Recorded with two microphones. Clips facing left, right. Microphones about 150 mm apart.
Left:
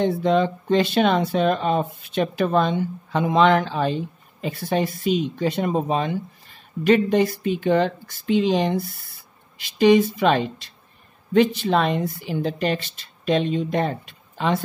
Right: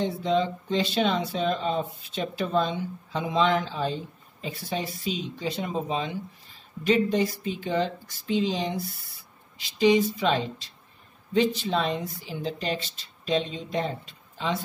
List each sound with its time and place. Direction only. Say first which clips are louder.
0.0 s speech: left 6 dB; 60° left (ahead or behind)